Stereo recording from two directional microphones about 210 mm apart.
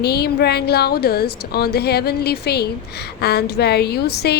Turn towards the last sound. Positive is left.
turn(degrees=50)  # may be behind; listen again after turning